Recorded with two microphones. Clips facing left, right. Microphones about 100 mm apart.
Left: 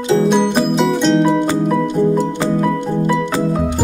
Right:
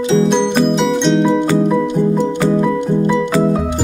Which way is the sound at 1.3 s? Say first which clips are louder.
Right 1 dB; 20° left (ahead or behind).